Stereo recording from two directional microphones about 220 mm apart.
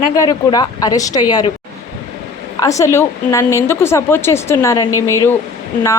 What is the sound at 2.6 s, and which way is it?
A woman's voice, 15° left (ahead or behind).